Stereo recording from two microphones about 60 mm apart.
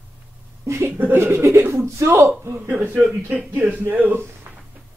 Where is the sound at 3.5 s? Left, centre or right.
Right.